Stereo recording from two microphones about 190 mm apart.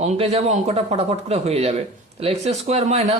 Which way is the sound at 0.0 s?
35° right (ahead or behind).